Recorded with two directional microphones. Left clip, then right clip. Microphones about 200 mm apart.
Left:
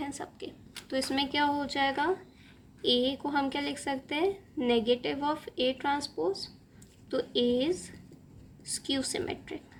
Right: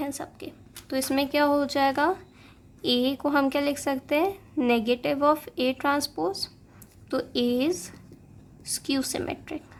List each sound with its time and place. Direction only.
0.0 s a woman's voice: 20° right (ahead or behind)